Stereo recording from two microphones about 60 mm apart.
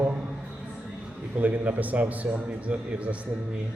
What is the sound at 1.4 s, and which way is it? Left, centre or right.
A man's voice, right.